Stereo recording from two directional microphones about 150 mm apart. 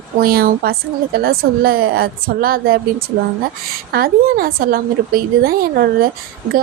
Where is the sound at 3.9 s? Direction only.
85° right.